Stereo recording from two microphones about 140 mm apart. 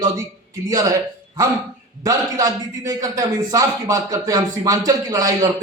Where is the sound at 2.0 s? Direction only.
25° right (ahead or behind).